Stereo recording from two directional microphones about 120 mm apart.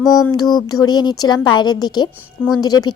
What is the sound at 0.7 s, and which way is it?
Speech, 35° left (ahead or behind).